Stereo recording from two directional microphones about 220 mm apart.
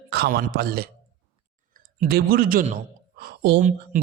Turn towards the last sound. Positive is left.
turn(degrees=-35)  # may be behind; listen again after turning